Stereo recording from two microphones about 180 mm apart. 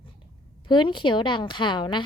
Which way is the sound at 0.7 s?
25° left (ahead or behind).